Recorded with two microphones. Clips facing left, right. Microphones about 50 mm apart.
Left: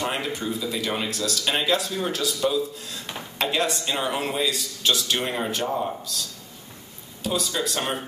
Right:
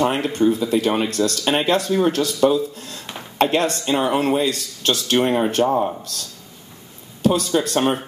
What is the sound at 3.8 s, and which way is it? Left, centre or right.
Speech, right.